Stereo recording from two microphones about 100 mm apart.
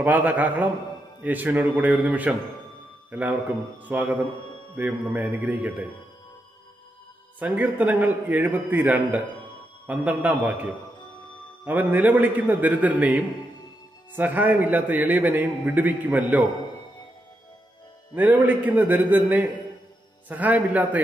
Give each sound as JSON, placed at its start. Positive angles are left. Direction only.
{"t": 0.0, "sound": "a man's voice", "side_deg": -15}
{"t": 7.3, "sound": "a man's voice", "side_deg": -15}
{"t": 18.1, "sound": "a man's voice", "side_deg": -15}